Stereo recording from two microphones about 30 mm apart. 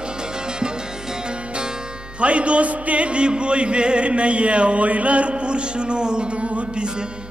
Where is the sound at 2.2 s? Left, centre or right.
Right.